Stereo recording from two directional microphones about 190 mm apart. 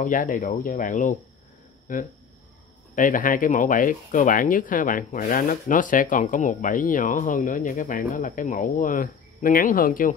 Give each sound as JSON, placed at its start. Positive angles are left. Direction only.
{"t": 0.0, "sound": "speech", "side_deg": 45}